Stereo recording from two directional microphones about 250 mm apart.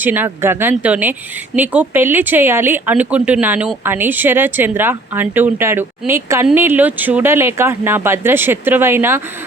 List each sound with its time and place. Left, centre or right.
0.0 s speech: centre